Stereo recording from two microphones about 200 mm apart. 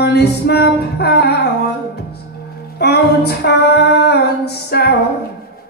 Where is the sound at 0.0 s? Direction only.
55° left (ahead or behind).